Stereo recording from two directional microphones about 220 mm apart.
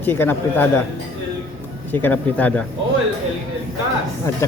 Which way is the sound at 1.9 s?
10° left (ahead or behind).